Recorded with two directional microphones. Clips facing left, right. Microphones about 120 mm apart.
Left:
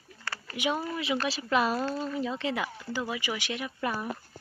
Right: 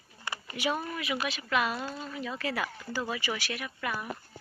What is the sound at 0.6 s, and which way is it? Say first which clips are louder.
Speech: left 2 dB; 20° left (ahead or behind).